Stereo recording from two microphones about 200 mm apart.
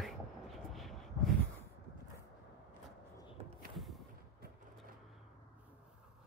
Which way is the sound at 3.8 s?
Centre (ahead or behind).